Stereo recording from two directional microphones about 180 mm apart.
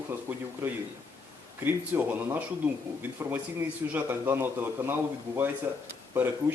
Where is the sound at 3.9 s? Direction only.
10° right (ahead or behind).